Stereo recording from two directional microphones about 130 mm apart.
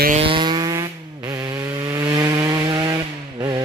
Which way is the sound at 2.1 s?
25° right (ahead or behind).